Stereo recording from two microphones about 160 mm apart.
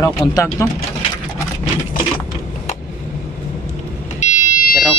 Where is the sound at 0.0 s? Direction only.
20° left (ahead or behind).